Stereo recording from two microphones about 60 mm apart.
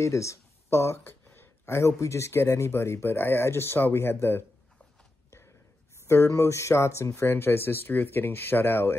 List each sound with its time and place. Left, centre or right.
0.0 s speech: left
1.3 s a sound: left
1.8 s speech: left
6.0 s speech: left